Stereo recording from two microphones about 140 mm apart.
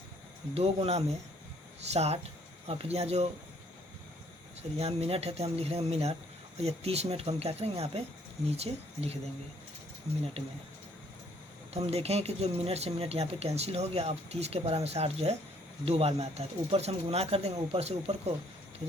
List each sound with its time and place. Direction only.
0.5 s speech: 45° right (ahead or behind)
4.8 s speech: 45° right (ahead or behind)
11.7 s speech: 45° right (ahead or behind)